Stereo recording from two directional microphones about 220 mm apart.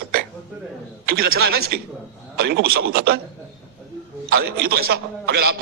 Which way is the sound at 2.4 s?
45° right (ahead or behind).